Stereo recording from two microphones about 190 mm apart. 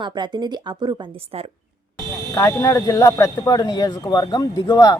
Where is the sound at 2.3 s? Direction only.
15° left (ahead or behind).